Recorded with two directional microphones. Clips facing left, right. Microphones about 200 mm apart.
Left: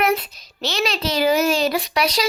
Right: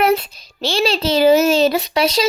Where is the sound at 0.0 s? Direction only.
30° right (ahead or behind).